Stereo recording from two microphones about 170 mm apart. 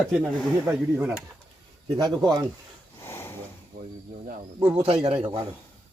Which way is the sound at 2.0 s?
25° right (ahead or behind).